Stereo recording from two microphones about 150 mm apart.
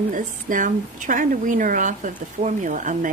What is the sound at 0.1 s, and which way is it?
A woman's voice, 60° right (ahead or behind).